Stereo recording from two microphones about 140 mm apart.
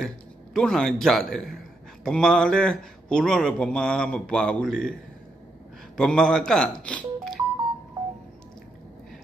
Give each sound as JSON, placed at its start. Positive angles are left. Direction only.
{"t": 0.0, "sound": "speech", "side_deg": 5}
{"t": 5.9, "sound": "speech", "side_deg": 5}